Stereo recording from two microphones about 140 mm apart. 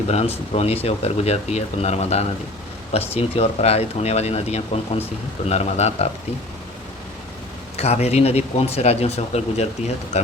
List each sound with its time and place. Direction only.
0.5 s speech: 45° left (ahead or behind)
7.8 s speech: 50° left (ahead or behind)